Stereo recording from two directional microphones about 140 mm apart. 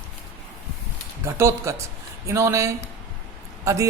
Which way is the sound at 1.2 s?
20° right (ahead or behind).